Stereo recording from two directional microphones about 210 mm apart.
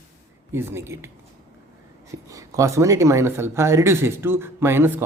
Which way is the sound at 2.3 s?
15° right (ahead or behind).